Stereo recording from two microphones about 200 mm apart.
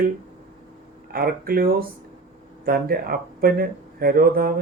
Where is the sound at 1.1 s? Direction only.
50° right (ahead or behind).